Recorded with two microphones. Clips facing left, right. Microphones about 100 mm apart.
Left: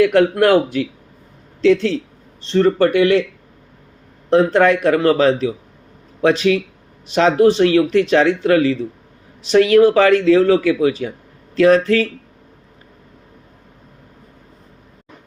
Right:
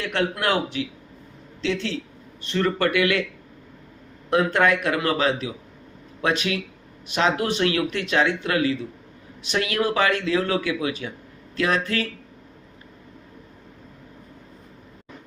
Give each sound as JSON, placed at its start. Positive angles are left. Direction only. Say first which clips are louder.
{"t": 0.0, "sound": "speech", "louder": "left 12 dB", "side_deg": 45}
{"t": 2.4, "sound": "speech", "louder": "left 8 dB", "side_deg": 30}
{"t": 4.3, "sound": "speech", "louder": "left 7 dB", "side_deg": 35}